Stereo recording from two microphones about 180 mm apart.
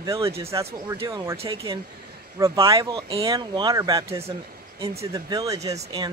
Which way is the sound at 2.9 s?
30° right (ahead or behind).